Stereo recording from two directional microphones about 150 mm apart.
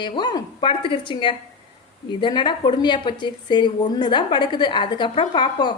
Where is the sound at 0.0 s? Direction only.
30° left (ahead or behind).